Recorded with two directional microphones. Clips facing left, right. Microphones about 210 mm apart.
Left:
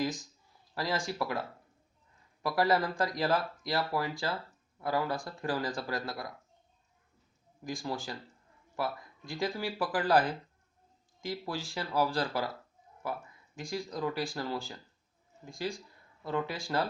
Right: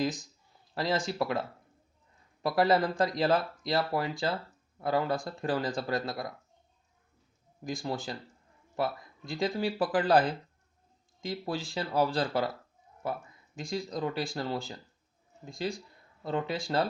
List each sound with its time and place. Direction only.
0.7 s speech: 25° right (ahead or behind)
7.9 s speech: 25° right (ahead or behind)
13.6 s speech: 25° right (ahead or behind)